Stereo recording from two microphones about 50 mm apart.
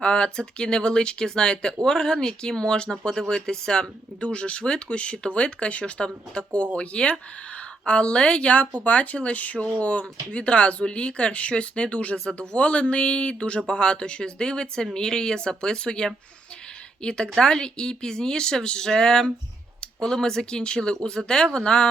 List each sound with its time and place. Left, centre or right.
0.0 s speech: centre
12.1 s speech: centre
12.4 s speech: left